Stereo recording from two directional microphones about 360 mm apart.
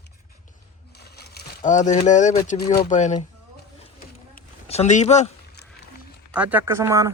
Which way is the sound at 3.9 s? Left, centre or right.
Centre.